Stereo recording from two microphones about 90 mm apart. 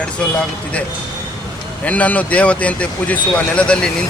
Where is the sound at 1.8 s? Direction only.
15° left (ahead or behind).